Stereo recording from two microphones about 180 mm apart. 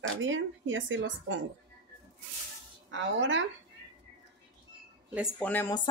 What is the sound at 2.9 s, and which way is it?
Speech, 90° right.